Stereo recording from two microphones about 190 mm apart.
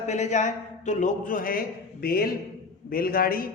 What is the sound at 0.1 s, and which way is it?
A man's voice, 35° left (ahead or behind).